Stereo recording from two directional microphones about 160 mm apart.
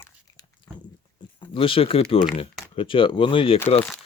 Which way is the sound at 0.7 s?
25° left (ahead or behind).